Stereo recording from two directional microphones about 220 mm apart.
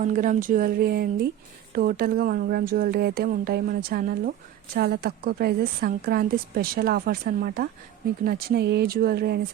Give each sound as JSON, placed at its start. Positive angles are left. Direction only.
{"t": 0.0, "sound": "a woman's voice", "side_deg": -35}